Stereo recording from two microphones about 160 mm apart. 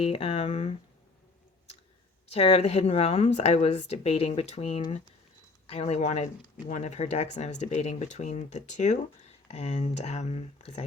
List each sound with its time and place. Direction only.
0.0 s a woman's voice: 35° left (ahead or behind)
2.3 s a woman's voice: 40° left (ahead or behind)